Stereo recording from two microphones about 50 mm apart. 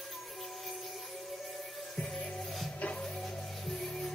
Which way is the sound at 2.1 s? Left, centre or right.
Centre.